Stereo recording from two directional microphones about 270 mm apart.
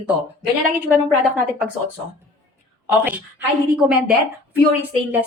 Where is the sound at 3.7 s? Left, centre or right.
Centre.